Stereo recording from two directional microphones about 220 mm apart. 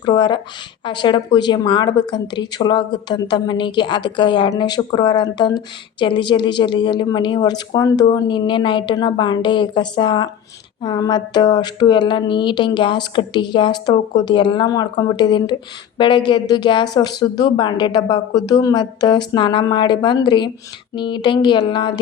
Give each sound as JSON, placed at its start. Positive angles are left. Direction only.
{"t": 0.0, "sound": "a woman's voice", "side_deg": 20}